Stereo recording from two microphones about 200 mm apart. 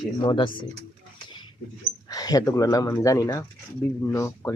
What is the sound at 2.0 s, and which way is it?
Speech, 20° left (ahead or behind).